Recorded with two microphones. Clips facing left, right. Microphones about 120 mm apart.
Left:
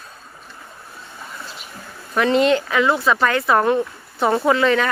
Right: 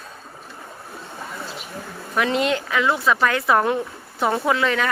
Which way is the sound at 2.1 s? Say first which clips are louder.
Left 5 dB; 5° right (ahead or behind).